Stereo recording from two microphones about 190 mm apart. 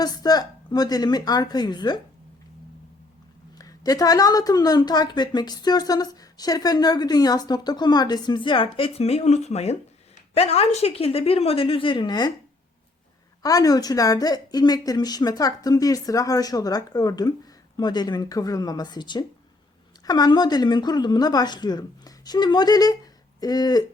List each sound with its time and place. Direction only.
0.0 s speech: 20° left (ahead or behind)
3.6 s a woman's voice: 20° left (ahead or behind)
13.4 s speech: 20° left (ahead or behind)